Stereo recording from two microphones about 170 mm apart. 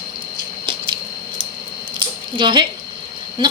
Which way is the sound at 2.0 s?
30° right (ahead or behind).